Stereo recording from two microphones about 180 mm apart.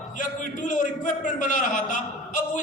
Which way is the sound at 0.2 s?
45° left (ahead or behind).